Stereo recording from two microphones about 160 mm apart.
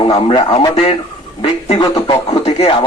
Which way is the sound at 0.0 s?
35° left (ahead or behind).